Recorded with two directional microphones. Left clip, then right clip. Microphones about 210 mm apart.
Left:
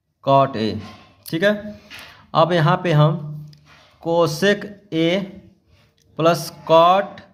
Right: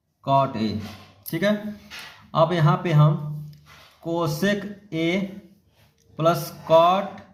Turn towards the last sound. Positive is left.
turn(degrees=35)  # may be behind; listen again after turning